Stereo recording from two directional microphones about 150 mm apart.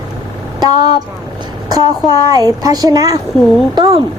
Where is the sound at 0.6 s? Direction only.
25° right (ahead or behind).